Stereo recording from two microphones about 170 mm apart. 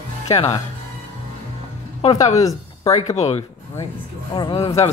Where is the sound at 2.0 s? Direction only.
35° left (ahead or behind).